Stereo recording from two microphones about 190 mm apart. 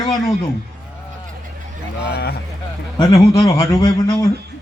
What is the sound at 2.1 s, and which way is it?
Speech, 55° left (ahead or behind).